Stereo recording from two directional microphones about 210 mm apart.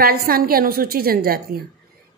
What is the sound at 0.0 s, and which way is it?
A woman's voice, 45° right (ahead or behind).